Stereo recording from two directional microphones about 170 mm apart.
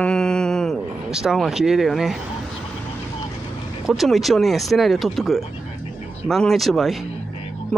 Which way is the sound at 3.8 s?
Centre (ahead or behind).